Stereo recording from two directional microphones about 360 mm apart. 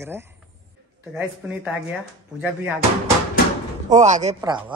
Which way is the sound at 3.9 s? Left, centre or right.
Centre.